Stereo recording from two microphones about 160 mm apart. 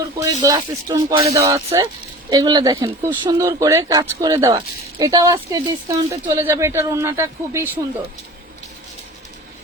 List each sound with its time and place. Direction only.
0.2 s speech: 20° right (ahead or behind)